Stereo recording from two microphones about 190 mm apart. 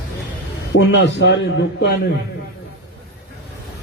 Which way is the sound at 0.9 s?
65° left (ahead or behind).